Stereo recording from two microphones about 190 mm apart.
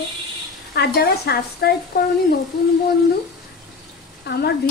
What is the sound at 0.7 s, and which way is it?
Speech, 55° left (ahead or behind).